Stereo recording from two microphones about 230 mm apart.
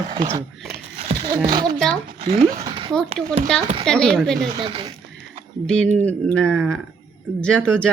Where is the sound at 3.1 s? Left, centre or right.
Right.